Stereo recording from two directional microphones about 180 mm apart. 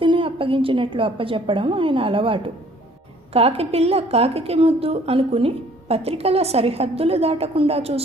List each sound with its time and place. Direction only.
0.0 s a woman's voice: 30° right (ahead or behind)